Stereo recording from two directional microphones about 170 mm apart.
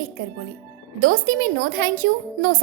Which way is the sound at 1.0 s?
55° right (ahead or behind).